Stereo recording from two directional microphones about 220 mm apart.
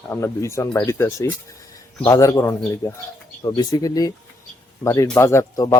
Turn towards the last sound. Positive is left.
turn(degrees=15)  # may be behind; listen again after turning